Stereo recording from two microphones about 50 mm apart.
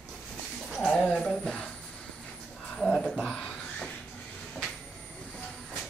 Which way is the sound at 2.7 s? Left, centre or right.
Centre.